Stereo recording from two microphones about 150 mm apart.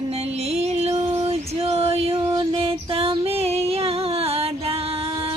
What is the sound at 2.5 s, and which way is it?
Music, 35° right (ahead or behind).